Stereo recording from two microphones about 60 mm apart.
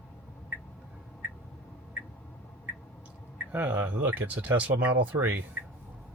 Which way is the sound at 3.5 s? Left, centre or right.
Right.